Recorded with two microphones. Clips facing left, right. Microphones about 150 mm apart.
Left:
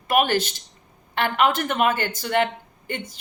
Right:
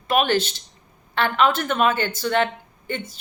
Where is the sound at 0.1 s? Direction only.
15° left (ahead or behind).